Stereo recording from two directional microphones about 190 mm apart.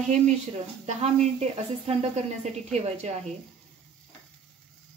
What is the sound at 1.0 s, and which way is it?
Speech, 35° right (ahead or behind).